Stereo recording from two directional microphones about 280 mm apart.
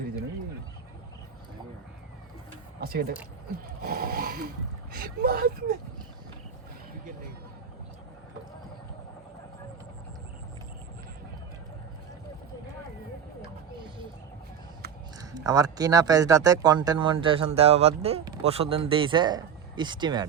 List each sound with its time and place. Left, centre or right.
2.8 s speech: right
15.2 s speech: centre